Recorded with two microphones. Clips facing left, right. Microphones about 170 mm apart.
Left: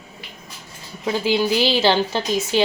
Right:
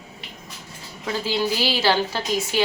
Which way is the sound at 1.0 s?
20° left (ahead or behind).